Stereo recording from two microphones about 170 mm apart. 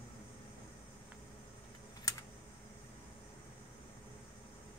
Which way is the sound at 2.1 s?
20° left (ahead or behind).